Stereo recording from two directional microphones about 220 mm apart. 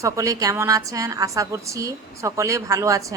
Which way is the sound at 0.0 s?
15° right (ahead or behind).